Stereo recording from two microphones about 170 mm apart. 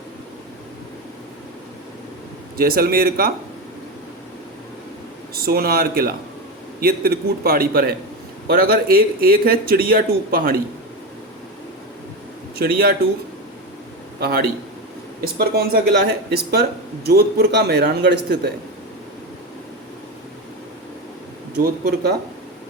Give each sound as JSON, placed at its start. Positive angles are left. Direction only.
{"t": 2.6, "sound": "a man's voice", "side_deg": -60}
{"t": 5.3, "sound": "a man's voice", "side_deg": -65}
{"t": 12.5, "sound": "a man's voice", "side_deg": -60}
{"t": 14.2, "sound": "a man's voice", "side_deg": -65}
{"t": 17.1, "sound": "a man's voice", "side_deg": -65}
{"t": 21.6, "sound": "a man's voice", "side_deg": -75}